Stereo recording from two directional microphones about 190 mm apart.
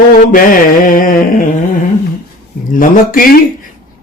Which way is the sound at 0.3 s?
45° left (ahead or behind).